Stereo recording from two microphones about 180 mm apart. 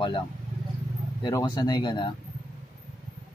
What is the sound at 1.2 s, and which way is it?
Speech, 20° left (ahead or behind).